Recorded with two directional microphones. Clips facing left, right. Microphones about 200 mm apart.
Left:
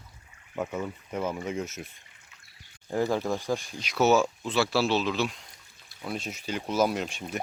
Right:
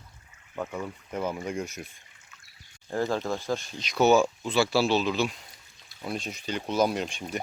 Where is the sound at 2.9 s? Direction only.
15° left (ahead or behind).